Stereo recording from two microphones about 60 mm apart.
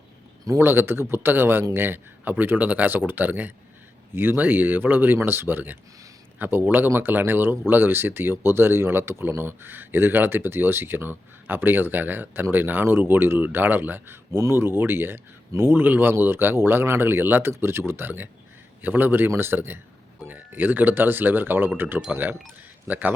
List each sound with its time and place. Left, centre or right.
0.6 s speech: right